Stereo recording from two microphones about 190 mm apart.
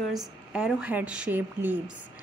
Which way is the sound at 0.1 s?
Centre (ahead or behind).